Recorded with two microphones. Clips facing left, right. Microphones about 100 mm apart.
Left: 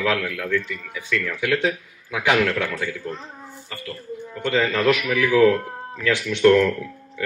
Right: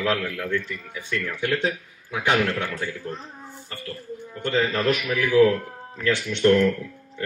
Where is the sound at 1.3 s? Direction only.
80° left.